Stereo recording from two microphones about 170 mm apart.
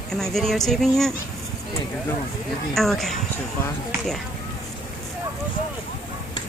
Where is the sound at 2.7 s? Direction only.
Centre (ahead or behind).